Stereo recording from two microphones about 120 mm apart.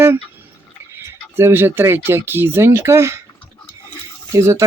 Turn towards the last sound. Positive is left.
turn(degrees=-25)  # may be behind; listen again after turning